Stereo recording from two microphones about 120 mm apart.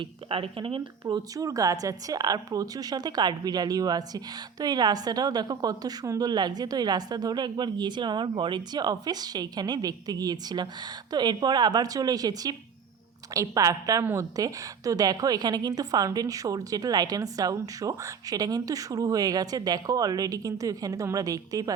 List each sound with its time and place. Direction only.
0.0 s speech: 50° right (ahead or behind)
1.0 s a woman's voice: 30° right (ahead or behind)